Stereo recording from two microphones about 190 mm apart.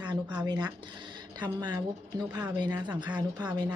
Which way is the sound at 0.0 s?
25° right (ahead or behind).